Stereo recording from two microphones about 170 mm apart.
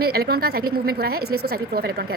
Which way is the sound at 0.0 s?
65° right (ahead or behind).